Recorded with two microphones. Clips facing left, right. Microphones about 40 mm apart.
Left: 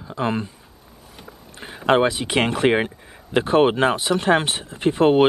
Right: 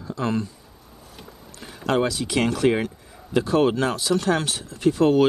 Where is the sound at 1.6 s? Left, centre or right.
Left.